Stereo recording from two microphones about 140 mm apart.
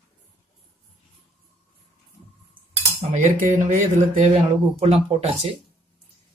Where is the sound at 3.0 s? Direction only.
65° right (ahead or behind).